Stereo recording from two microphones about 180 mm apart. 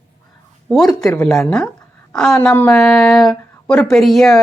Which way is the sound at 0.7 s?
Centre (ahead or behind).